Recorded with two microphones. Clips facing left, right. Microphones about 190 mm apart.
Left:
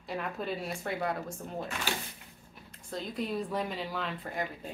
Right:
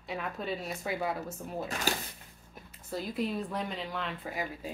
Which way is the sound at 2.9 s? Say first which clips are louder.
Right 1 dB; 5° right (ahead or behind).